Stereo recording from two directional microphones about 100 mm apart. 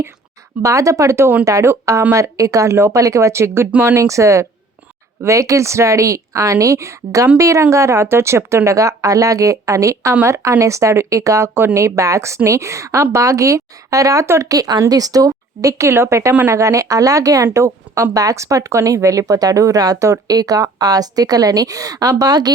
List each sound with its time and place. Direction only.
0.6 s a woman's voice: 30° right (ahead or behind)
15.3 s a woman's voice: 30° right (ahead or behind)